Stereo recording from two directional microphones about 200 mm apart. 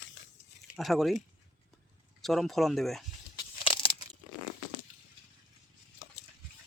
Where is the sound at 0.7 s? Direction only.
Centre (ahead or behind).